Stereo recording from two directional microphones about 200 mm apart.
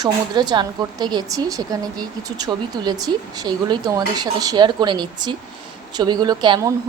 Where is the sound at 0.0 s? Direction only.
20° right (ahead or behind).